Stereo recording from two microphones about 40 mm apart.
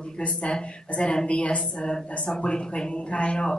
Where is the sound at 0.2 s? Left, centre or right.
Left.